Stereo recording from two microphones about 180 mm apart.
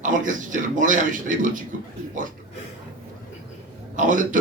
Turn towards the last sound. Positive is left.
turn(degrees=-45)  # may be behind; listen again after turning